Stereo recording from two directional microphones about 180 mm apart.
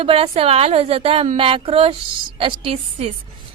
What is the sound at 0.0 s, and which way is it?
A woman's voice, 30° right (ahead or behind).